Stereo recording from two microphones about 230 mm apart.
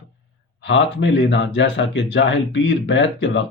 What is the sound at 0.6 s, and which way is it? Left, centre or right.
Speech, left.